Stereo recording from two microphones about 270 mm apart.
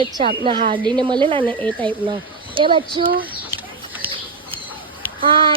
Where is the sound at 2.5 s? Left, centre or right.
Centre.